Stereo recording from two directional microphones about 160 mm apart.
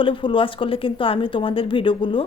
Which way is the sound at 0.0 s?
30° left (ahead or behind).